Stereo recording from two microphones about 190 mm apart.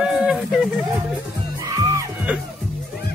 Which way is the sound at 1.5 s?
20° right (ahead or behind).